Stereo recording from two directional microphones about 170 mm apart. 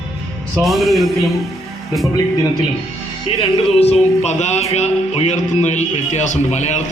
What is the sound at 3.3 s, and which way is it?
Music, 35° left (ahead or behind).